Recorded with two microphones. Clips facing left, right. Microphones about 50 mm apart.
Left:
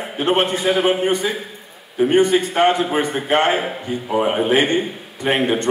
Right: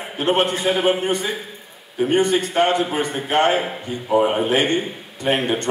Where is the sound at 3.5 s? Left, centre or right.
Centre.